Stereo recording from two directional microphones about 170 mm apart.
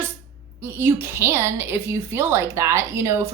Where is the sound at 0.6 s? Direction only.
15° right (ahead or behind).